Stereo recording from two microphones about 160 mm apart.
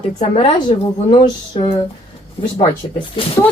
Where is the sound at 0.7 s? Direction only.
40° left (ahead or behind).